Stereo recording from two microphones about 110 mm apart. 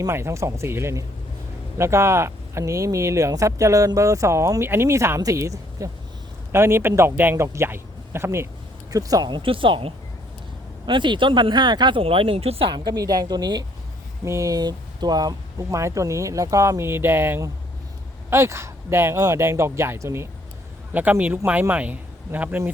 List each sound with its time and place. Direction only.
0.1 s a man's voice: 25° right (ahead or behind)
9.4 s speech: 50° right (ahead or behind)
12.7 s a woman's voice: 40° right (ahead or behind); by 22.7 s 15° right (ahead or behind)